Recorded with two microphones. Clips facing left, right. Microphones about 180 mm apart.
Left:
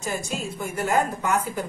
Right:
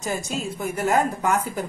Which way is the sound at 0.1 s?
40° right (ahead or behind).